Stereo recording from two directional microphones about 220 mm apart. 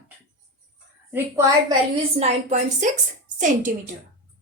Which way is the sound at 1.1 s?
15° right (ahead or behind).